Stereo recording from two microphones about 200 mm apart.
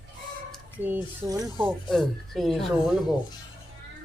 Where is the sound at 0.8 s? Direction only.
15° right (ahead or behind).